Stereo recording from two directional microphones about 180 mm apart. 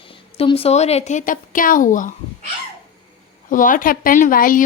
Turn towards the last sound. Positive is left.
turn(degrees=50)  # may be behind; listen again after turning